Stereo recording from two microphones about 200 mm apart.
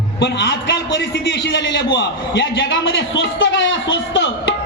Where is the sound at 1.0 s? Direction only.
60° left (ahead or behind).